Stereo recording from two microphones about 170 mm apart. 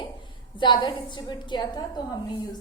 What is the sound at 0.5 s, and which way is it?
A woman's voice, 25° left (ahead or behind).